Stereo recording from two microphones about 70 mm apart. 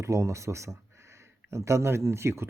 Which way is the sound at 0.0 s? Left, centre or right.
Right.